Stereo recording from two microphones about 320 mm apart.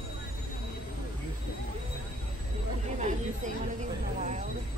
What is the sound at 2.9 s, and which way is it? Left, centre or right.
Speech, right.